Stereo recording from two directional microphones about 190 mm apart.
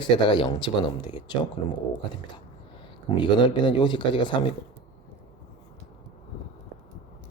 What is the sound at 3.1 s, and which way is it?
Speech, 25° left (ahead or behind).